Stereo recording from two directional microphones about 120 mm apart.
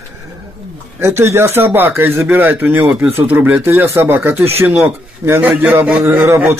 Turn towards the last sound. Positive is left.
turn(degrees=-20)  # may be behind; listen again after turning